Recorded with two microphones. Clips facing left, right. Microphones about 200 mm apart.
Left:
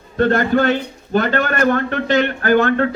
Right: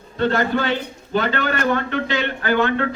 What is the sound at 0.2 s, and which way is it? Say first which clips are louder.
A man's voice: left 4 dB; 50° left (ahead or behind).